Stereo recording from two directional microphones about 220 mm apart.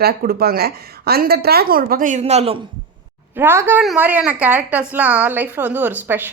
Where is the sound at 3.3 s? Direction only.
10° right (ahead or behind).